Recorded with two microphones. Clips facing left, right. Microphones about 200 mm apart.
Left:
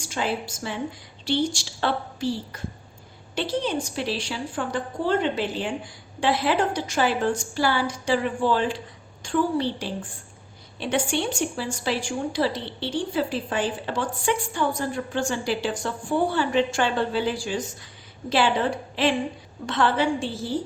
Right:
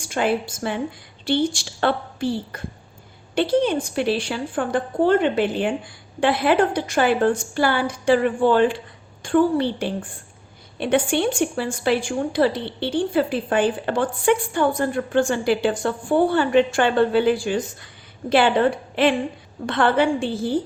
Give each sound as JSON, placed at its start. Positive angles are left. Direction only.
{"t": 0.0, "sound": "a woman's voice", "side_deg": -55}